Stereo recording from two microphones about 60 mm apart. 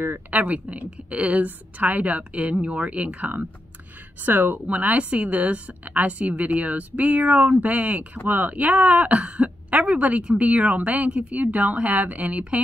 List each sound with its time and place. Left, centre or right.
0.3 s a woman's voice: right